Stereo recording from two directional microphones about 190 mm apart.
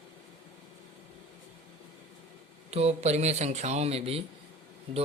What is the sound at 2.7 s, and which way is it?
Speech, 35° right (ahead or behind).